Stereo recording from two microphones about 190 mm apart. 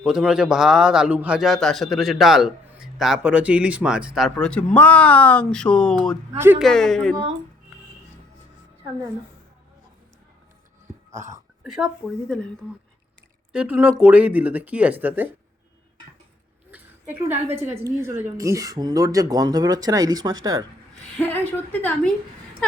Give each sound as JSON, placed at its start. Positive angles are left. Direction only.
{"t": 0.0, "sound": "a man's voice", "side_deg": -5}
{"t": 6.3, "sound": "speech", "side_deg": -10}
{"t": 6.6, "sound": "a man's voice", "side_deg": 0}
{"t": 11.6, "sound": "a man's voice", "side_deg": 0}
{"t": 13.5, "sound": "speech", "side_deg": -5}
{"t": 16.7, "sound": "a sound", "side_deg": -10}
{"t": 17.8, "sound": "speech", "side_deg": -15}
{"t": 21.2, "sound": "a woman's voice", "side_deg": 10}